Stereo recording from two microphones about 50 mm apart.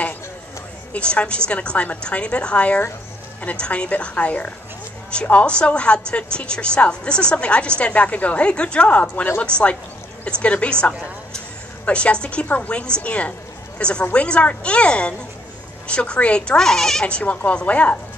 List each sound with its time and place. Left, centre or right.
0.9 s a woman's voice: left
17.0 s a woman's voice: left